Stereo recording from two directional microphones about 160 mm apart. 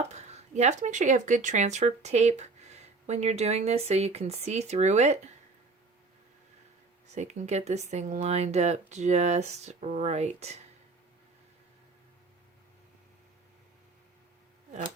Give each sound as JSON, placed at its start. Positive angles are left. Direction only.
{"t": 0.1, "sound": "speech", "side_deg": -45}
{"t": 7.1, "sound": "speech", "side_deg": -45}